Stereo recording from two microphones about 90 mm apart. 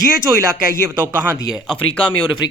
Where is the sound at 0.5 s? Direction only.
25° right (ahead or behind).